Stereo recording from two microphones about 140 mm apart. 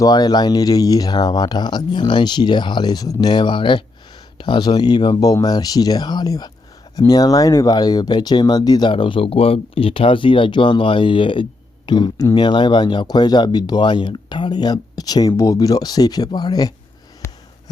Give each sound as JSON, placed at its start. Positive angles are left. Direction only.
{"t": 0.0, "sound": "speech", "side_deg": 30}
{"t": 17.2, "sound": "snort", "side_deg": 20}